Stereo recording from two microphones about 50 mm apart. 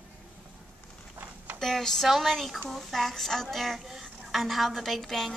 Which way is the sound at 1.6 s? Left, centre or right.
Centre.